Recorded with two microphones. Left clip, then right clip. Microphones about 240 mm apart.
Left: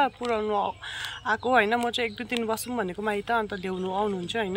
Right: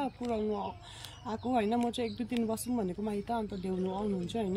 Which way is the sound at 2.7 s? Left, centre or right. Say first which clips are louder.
Left 7 dB; left.